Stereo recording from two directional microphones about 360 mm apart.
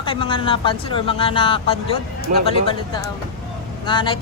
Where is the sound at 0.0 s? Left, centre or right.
Centre.